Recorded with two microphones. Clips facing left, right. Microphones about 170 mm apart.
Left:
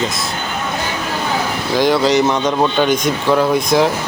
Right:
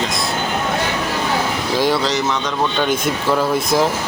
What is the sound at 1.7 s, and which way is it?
Speech, centre (ahead or behind).